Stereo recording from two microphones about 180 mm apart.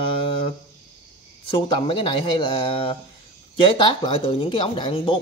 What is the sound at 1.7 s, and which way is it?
Speech, 30° left (ahead or behind).